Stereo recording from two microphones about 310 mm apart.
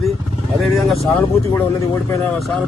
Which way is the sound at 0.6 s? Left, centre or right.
Centre.